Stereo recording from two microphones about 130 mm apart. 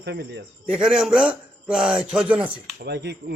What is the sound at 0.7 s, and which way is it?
A man's voice, 5° right (ahead or behind).